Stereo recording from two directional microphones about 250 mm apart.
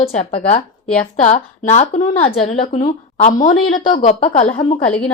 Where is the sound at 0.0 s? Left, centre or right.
Left.